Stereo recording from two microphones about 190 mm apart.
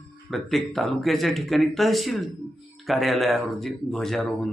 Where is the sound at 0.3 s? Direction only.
Centre (ahead or behind).